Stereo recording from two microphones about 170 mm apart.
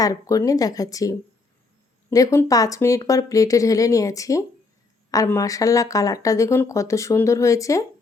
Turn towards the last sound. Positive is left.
turn(degrees=20)  # may be behind; listen again after turning